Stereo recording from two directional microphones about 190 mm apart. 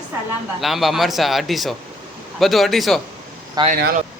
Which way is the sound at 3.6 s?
20° right (ahead or behind).